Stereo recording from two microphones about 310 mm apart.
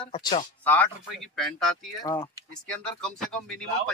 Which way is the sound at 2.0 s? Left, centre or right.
Centre.